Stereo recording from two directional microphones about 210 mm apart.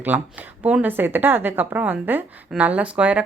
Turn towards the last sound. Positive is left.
turn(degrees=-5)  # may be behind; listen again after turning